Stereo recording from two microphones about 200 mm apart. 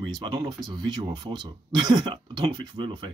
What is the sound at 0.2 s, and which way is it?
Speech, 20° right (ahead or behind).